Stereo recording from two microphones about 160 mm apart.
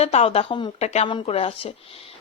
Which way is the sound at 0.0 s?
40° left (ahead or behind).